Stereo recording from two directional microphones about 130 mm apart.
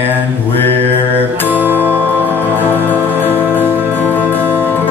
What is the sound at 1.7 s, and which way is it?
Music, 15° left (ahead or behind).